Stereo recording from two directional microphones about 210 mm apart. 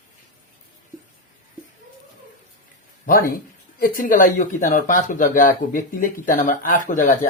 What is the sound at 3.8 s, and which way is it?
Speech, 40° left (ahead or behind).